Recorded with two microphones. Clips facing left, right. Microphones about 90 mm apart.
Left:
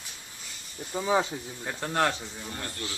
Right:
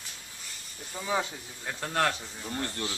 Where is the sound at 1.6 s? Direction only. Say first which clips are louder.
Left 1 dB; 10° left (ahead or behind).